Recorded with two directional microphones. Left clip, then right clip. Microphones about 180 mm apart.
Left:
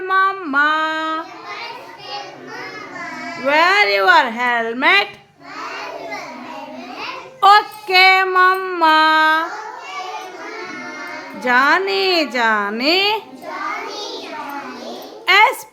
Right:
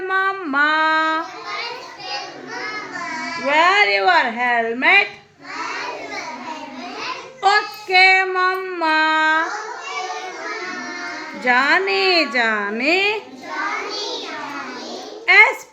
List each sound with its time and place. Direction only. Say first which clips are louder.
0.1 s female singing: left 4 dB; 5° left (ahead or behind)
3.4 s a woman's voice: left 1 dB; 15° left (ahead or behind)
7.4 s child singing: left 6 dB; 20° left (ahead or behind)
11.4 s a woman's voice: left 2 dB; 10° left (ahead or behind)
15.3 s a woman's voice: even; 15° left (ahead or behind)